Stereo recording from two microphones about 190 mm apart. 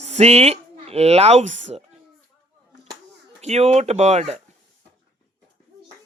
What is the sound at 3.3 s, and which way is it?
Speech, 35° right (ahead or behind).